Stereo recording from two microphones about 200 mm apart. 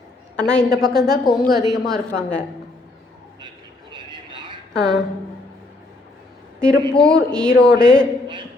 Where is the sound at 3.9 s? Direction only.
25° right (ahead or behind).